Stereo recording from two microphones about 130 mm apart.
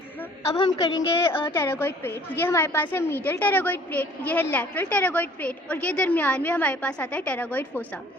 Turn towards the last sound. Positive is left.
turn(degrees=10)  # may be behind; listen again after turning